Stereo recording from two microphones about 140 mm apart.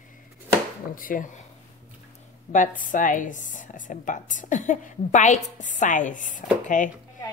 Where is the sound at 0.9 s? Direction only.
75° left (ahead or behind).